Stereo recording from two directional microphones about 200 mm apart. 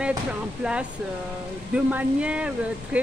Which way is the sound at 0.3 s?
5° right (ahead or behind).